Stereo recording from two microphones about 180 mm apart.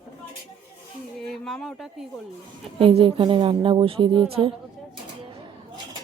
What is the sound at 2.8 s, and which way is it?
Speech, 30° right (ahead or behind).